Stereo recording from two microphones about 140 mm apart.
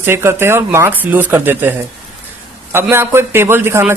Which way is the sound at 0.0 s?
15° right (ahead or behind).